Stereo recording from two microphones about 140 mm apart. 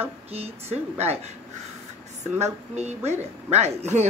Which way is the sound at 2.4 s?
55° right (ahead or behind).